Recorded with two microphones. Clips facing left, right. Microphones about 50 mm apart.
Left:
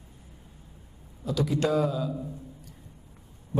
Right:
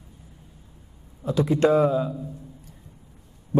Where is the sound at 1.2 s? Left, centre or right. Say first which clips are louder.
Right 6 dB; right.